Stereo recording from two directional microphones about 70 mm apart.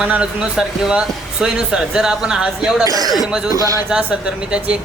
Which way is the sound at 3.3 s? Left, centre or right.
Centre.